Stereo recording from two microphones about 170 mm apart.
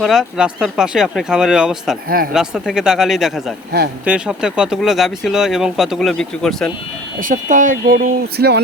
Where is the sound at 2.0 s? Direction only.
60° right (ahead or behind).